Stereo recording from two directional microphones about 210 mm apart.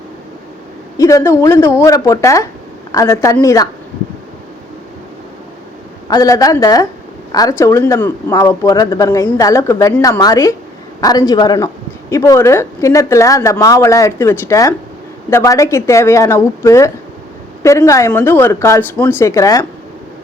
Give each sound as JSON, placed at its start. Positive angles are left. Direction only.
{"t": 0.9, "sound": "speech", "side_deg": 15}
{"t": 6.1, "sound": "speech", "side_deg": 15}